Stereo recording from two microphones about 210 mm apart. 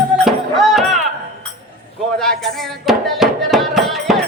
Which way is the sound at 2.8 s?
Centre (ahead or behind).